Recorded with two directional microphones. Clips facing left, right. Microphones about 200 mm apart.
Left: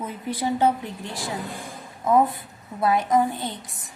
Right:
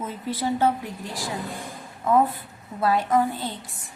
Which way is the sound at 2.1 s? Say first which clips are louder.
Left 1 dB; 15° left (ahead or behind).